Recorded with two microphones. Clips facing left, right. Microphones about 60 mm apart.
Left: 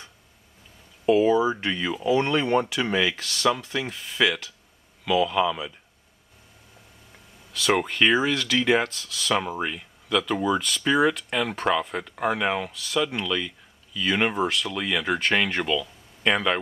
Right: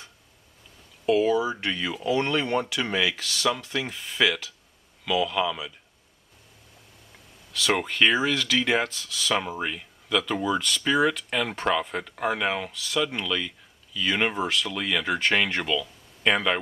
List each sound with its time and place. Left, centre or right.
1.2 s speech: left
1.6 s speech: centre
7.5 s speech: centre